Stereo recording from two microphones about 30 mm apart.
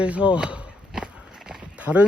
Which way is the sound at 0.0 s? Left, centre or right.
Right.